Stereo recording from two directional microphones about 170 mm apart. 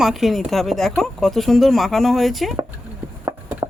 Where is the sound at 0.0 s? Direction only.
Centre (ahead or behind).